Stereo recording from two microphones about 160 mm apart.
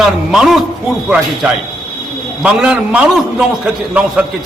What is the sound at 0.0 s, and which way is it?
A man's voice, centre (ahead or behind).